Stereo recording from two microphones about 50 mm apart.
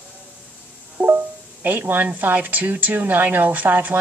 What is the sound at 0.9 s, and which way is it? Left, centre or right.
A woman's voice, right.